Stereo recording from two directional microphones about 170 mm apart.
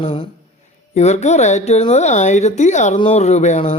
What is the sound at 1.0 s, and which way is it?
Speech, 45° left (ahead or behind).